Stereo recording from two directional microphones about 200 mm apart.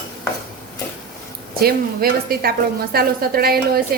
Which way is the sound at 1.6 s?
50° right (ahead or behind).